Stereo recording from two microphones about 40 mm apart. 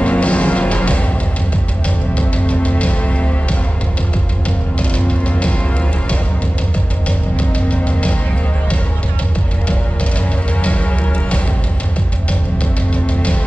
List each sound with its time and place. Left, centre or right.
0.0 s music: left
2.1 s music: left
4.7 s music: left
7.1 s music: left
10.6 s music: left
12.9 s music: left